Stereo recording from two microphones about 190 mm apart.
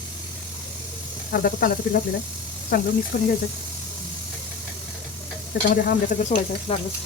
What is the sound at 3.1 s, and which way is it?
Speech, 55° left (ahead or behind).